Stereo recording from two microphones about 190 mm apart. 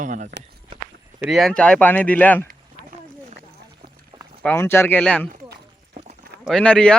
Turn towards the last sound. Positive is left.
turn(degrees=5)  # may be behind; listen again after turning